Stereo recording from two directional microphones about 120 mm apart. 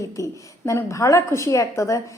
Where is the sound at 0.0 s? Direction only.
25° left (ahead or behind).